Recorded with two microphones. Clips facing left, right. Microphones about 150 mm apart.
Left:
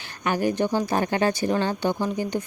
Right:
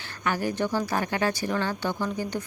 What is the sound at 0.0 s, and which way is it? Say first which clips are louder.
Speech: left 4 dB; 20° left (ahead or behind).